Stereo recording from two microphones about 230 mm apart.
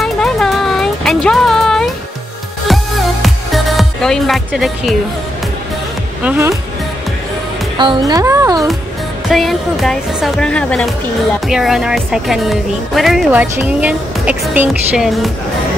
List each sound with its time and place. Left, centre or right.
0.0 s a sound: centre
2.7 s music: centre
6.2 s speech: centre
7.7 s speech: centre
9.3 s speech: centre